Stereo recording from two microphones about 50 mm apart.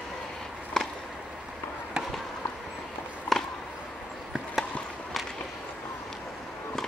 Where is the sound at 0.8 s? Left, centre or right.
Centre.